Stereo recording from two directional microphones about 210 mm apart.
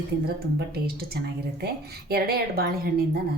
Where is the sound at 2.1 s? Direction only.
50° right (ahead or behind).